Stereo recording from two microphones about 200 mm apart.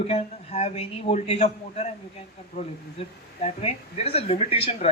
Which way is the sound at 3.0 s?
30° left (ahead or behind).